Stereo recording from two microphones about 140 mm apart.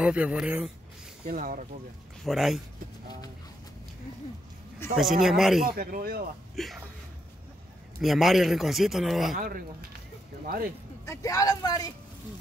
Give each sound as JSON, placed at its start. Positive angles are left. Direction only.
{"t": 0.0, "sound": "a man's voice", "side_deg": -10}
{"t": 1.3, "sound": "speech", "side_deg": -70}
{"t": 2.2, "sound": "speech", "side_deg": 0}
{"t": 4.8, "sound": "speech", "side_deg": 20}
{"t": 5.2, "sound": "speech", "side_deg": 0}
{"t": 5.7, "sound": "speech", "side_deg": -90}
{"t": 6.5, "sound": "speech", "side_deg": 0}
{"t": 8.0, "sound": "speech", "side_deg": 0}
{"t": 9.3, "sound": "speech", "side_deg": -90}
{"t": 11.1, "sound": "speech", "side_deg": 25}